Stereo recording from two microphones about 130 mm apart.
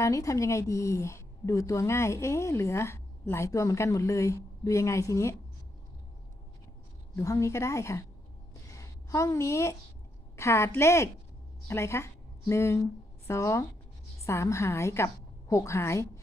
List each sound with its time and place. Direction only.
0.0 s a woman's voice: 25° left (ahead or behind)
7.2 s a woman's voice: 25° left (ahead or behind)
8.6 s a sound: 25° left (ahead or behind)
10.3 s a woman's voice: 20° left (ahead or behind)